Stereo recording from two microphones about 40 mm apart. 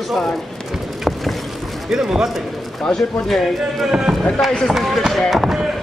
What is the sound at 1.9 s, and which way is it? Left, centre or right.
Speech, centre.